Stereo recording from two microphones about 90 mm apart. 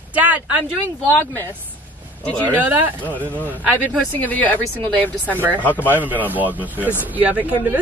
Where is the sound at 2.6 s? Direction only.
20° right (ahead or behind).